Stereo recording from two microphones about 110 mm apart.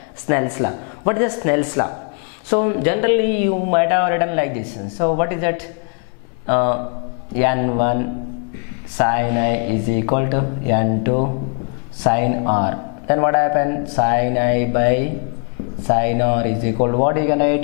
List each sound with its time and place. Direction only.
0.3 s speech: 10° left (ahead or behind)